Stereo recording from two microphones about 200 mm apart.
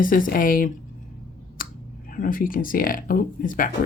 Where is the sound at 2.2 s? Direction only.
45° left (ahead or behind).